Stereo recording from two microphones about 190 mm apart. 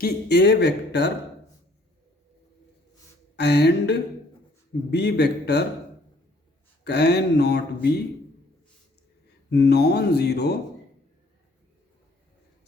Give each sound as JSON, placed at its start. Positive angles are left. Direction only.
{"t": 0.0, "sound": "speech", "side_deg": 60}
{"t": 3.3, "sound": "speech", "side_deg": 60}
{"t": 6.8, "sound": "speech", "side_deg": 60}
{"t": 9.5, "sound": "speech", "side_deg": 60}